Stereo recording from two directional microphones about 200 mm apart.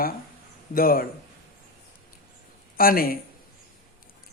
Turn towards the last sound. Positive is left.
turn(degrees=45)  # may be behind; listen again after turning